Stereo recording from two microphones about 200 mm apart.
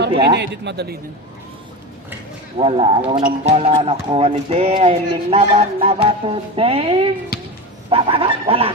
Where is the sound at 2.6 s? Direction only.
25° right (ahead or behind).